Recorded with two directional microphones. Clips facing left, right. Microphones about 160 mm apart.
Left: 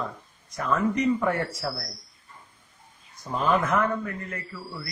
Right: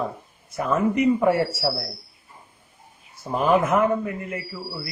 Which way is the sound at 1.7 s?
30° right (ahead or behind).